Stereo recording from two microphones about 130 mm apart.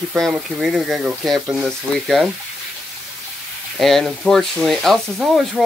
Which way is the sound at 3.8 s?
Centre (ahead or behind).